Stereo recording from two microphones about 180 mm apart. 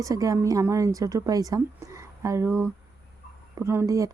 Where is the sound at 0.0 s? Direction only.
20° right (ahead or behind).